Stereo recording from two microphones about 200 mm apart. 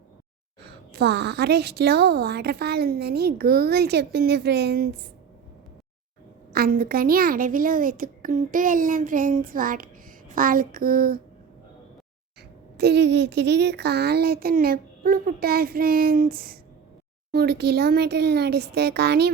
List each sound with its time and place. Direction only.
0.6 s a woman's voice: 55° right (ahead or behind)
6.5 s a woman's voice: 45° right (ahead or behind)
12.7 s a woman's voice: 55° right (ahead or behind)